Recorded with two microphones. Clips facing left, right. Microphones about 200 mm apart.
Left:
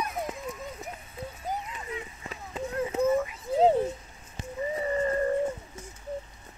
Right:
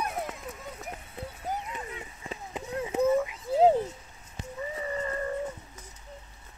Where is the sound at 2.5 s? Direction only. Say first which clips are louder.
Left 1 dB; 15° right (ahead or behind).